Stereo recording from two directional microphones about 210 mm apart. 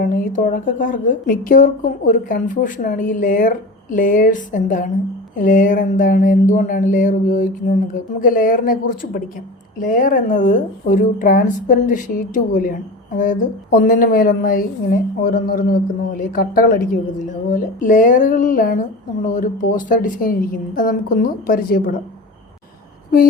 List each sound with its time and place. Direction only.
0.0 s a woman's voice: 40° left (ahead or behind)